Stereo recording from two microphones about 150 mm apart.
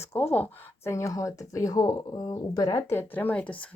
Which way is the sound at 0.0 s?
15° left (ahead or behind).